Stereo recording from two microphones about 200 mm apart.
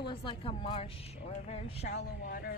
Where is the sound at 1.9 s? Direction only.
55° left (ahead or behind).